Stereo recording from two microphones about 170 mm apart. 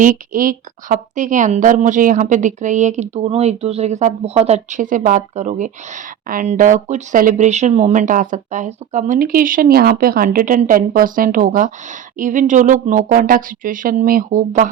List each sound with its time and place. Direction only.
0.0 s a woman's voice: 55° right (ahead or behind)